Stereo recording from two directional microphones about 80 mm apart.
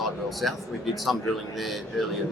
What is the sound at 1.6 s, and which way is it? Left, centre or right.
Speech, centre.